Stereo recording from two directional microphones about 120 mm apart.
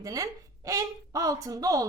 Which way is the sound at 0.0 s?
30° right (ahead or behind).